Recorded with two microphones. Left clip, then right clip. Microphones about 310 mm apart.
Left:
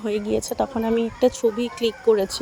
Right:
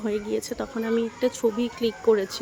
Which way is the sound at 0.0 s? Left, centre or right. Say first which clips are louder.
Left 3 dB; centre.